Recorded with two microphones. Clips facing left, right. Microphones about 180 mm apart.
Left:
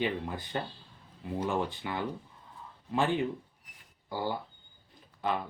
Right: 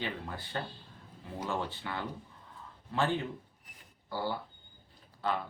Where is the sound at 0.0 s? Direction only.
15° left (ahead or behind).